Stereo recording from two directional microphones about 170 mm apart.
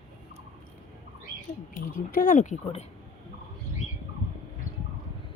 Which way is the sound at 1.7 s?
50° left (ahead or behind).